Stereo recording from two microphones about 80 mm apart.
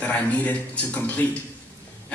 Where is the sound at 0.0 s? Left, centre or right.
Centre.